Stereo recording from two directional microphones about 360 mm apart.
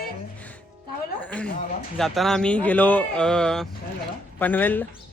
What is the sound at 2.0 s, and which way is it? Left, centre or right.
Speech, centre.